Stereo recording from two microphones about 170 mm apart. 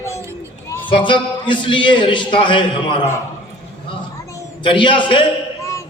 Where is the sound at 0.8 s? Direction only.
30° left (ahead or behind).